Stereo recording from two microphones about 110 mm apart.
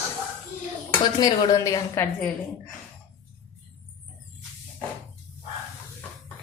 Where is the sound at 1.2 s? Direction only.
35° left (ahead or behind).